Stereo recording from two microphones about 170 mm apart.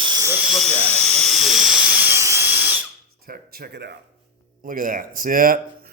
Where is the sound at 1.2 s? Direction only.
Centre (ahead or behind).